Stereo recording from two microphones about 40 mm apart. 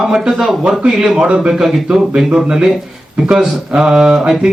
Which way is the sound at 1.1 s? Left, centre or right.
Right.